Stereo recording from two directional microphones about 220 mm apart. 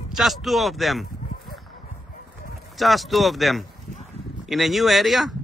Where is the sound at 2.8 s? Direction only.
Centre (ahead or behind).